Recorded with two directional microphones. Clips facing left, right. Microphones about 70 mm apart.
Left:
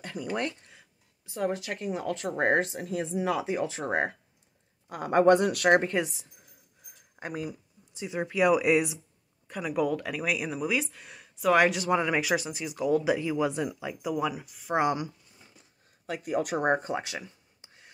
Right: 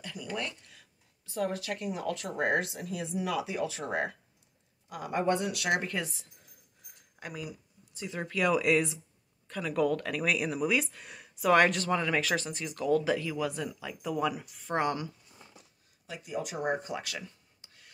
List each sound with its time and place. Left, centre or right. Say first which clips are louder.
0.0 s speech: left 5 dB; left
0.7 s speech: left 2 dB; left
5.2 s speech: left 9 dB; left
7.2 s speech: left 5 dB; left
7.9 s speech: left 4 dB; centre
14.1 s speech: right 1 dB; centre
14.8 s speech: left 4 dB; centre
16.1 s speech: left 7 dB; left
17.0 s a sound: left 2 dB; left